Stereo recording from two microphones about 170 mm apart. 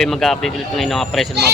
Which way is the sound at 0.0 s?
Centre (ahead or behind).